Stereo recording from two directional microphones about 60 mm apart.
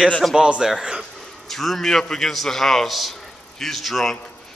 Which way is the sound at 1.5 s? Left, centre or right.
Centre.